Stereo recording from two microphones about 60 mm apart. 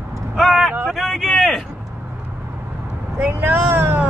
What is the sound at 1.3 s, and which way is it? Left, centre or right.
Vehicle, centre.